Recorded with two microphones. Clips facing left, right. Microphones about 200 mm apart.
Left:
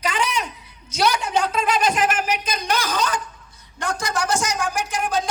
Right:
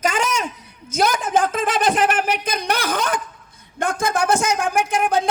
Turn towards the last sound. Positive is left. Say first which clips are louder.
# right 5 dB
turn(degrees=-55)  # may be behind; listen again after turning